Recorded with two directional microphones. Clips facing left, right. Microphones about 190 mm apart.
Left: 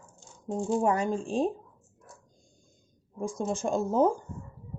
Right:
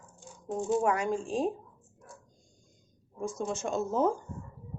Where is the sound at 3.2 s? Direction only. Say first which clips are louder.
Left 3 dB; 35° left (ahead or behind).